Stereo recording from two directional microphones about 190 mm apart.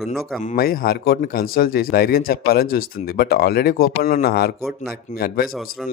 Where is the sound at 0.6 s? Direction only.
50° left (ahead or behind).